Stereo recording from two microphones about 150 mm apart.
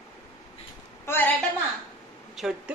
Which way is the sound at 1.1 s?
10° left (ahead or behind).